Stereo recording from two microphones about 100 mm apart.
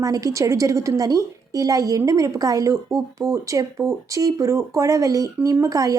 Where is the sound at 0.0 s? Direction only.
35° right (ahead or behind).